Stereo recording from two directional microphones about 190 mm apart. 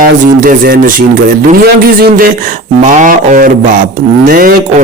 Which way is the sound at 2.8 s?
40° right (ahead or behind).